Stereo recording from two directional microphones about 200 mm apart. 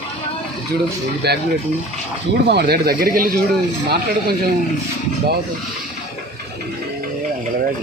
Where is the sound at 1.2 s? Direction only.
55° right (ahead or behind).